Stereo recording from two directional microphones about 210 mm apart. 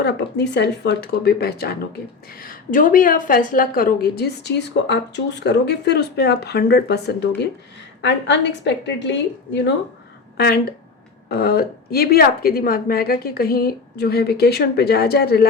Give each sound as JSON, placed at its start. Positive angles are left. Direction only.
{"t": 0.0, "sound": "a woman's voice", "side_deg": 55}